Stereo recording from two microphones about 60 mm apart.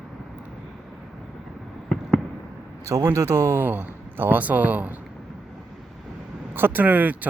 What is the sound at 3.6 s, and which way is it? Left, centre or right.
Speech, right.